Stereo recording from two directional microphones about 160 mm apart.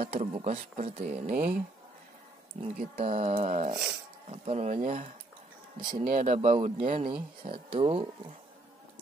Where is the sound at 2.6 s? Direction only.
50° right (ahead or behind).